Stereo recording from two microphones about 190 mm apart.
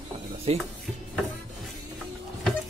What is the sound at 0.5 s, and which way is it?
Speech, 30° right (ahead or behind).